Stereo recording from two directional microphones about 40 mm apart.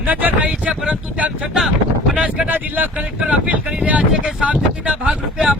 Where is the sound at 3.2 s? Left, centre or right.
Right.